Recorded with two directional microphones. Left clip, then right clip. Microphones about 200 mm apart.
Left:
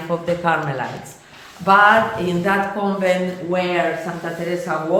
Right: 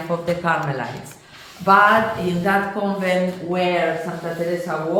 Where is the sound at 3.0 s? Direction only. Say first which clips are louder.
Left 2 dB; 15° left (ahead or behind).